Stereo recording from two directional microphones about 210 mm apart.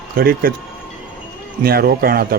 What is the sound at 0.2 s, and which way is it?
Speech, 45° right (ahead or behind).